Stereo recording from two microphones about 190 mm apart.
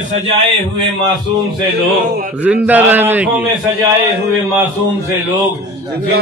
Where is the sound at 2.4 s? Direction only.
10° right (ahead or behind).